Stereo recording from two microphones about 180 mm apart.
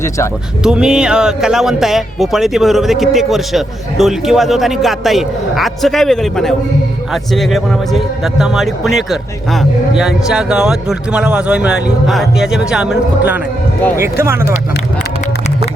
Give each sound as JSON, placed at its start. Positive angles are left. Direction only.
{"t": 0.6, "sound": "speech", "side_deg": -5}